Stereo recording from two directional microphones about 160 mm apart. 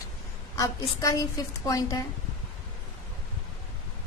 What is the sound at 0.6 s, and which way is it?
A woman's voice, 20° left (ahead or behind).